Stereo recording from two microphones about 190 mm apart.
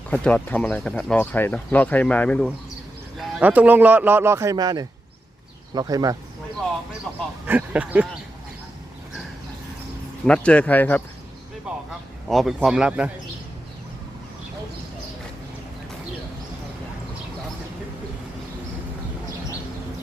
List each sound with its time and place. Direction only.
0.1 s speech: 5° left (ahead or behind)
3.2 s a man's voice: 5° right (ahead or behind)
7.1 s a man's voice: centre (ahead or behind)
10.2 s speech: 5° left (ahead or behind)
11.7 s speech: 5° right (ahead or behind)